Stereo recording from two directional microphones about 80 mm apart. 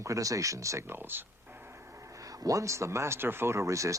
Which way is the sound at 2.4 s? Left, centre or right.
Right.